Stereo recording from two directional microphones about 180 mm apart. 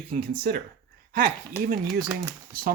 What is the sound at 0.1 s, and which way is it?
Speech, 55° right (ahead or behind).